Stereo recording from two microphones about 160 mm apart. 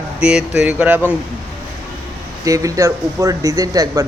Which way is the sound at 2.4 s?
20° right (ahead or behind).